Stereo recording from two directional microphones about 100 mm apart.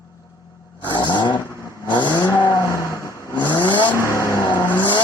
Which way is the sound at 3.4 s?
45° left (ahead or behind).